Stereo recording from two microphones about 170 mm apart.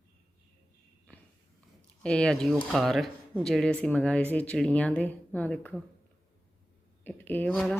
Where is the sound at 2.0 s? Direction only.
5° left (ahead or behind).